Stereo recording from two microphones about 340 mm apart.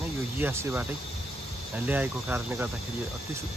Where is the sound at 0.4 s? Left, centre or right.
Centre.